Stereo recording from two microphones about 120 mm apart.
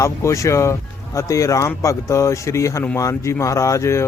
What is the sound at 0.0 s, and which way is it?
Speech, 25° left (ahead or behind).